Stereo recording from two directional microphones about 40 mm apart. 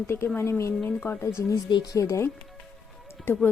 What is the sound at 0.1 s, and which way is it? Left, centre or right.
Speech, left.